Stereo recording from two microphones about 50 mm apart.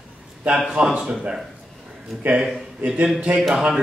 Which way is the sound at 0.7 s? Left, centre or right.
Centre.